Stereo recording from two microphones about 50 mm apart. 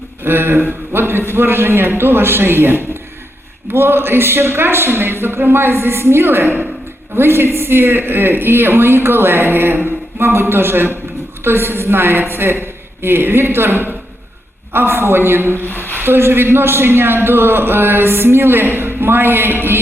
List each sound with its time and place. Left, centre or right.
0.3 s a man's voice: right